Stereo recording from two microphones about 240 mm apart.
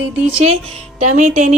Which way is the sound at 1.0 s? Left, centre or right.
Right.